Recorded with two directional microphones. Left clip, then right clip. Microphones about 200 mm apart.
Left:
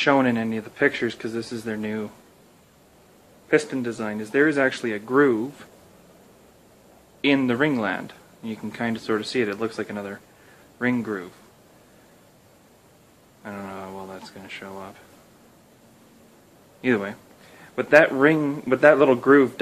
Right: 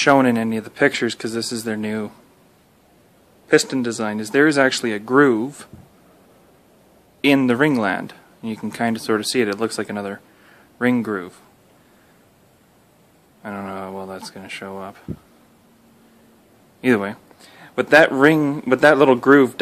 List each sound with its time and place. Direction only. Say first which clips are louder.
0.0 s speech: right 5 dB; 45° right (ahead or behind)
3.4 s speech: right 5 dB; 50° right (ahead or behind)
7.2 s speech: right 5 dB; 45° right (ahead or behind)
13.4 s speech: right 5 dB; 45° right (ahead or behind)
16.8 s speech: right 5 dB; 45° right (ahead or behind)